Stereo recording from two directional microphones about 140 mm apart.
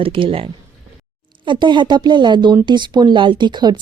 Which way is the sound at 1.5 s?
35° right (ahead or behind).